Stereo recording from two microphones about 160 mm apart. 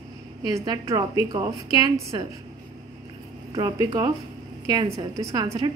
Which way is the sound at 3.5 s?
25° right (ahead or behind).